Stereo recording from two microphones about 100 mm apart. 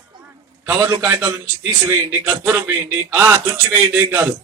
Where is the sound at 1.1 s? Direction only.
25° right (ahead or behind).